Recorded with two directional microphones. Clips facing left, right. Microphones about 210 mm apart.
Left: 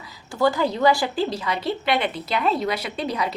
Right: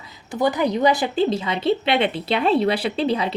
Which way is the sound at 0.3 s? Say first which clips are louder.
Right 1 dB; 20° right (ahead or behind).